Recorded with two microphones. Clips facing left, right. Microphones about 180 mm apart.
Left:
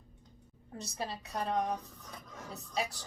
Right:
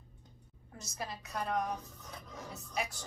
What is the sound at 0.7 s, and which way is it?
A woman's voice, 30° left (ahead or behind).